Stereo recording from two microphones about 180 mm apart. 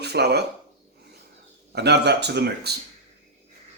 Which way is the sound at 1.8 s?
65° right (ahead or behind).